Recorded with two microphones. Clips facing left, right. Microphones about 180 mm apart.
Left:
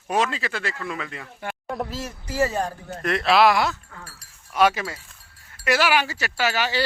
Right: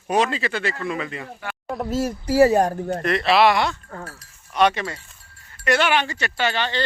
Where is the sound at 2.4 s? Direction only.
40° right (ahead or behind).